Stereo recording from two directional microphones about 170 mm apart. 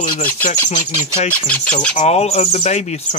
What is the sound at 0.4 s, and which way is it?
Speech, 45° left (ahead or behind).